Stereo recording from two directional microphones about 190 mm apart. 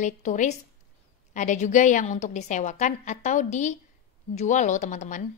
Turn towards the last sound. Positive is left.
turn(degrees=40)  # may be behind; listen again after turning